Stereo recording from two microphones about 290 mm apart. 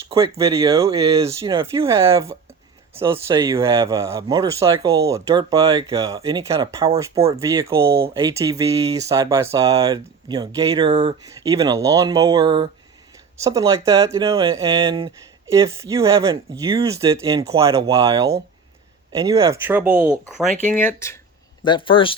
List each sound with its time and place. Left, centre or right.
0.1 s speech: centre
7.3 s speech: centre
20.7 s speech: centre